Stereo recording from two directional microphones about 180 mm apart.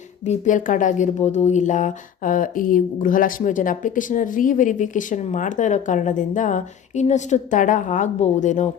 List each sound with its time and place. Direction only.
0.3 s speech: 45° left (ahead or behind)